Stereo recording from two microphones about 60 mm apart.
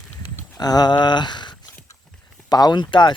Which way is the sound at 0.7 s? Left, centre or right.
Left.